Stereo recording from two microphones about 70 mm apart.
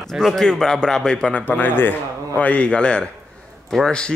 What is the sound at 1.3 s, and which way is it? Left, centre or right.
A man's voice, left.